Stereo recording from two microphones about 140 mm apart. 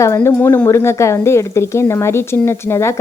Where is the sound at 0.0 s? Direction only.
20° left (ahead or behind).